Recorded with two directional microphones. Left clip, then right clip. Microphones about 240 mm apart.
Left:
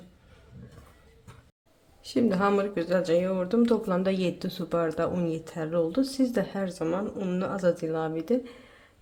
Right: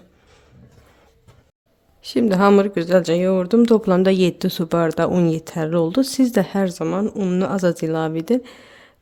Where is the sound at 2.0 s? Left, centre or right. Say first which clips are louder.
Right 9 dB; right.